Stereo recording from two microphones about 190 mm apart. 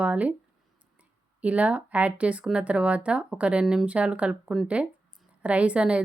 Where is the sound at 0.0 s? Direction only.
5° right (ahead or behind).